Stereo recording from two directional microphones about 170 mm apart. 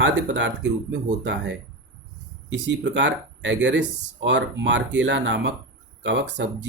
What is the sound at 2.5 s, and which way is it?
Speech, 90° right.